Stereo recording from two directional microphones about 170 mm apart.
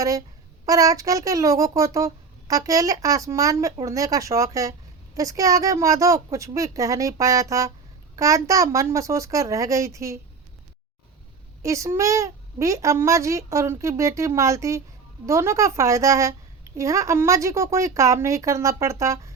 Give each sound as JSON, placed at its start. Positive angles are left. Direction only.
{"t": 0.0, "sound": "a child's voice", "side_deg": -20}
{"t": 11.6, "sound": "a child's voice", "side_deg": -20}